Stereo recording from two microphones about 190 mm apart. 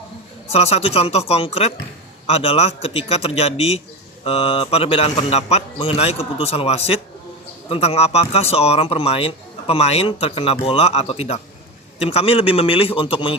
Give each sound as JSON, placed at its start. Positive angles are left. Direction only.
{"t": 0.5, "sound": "a man's voice", "side_deg": 30}